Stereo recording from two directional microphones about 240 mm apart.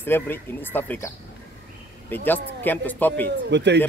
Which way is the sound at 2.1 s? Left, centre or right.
Centre.